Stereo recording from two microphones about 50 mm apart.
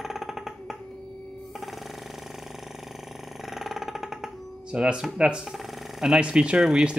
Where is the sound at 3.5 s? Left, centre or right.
Centre.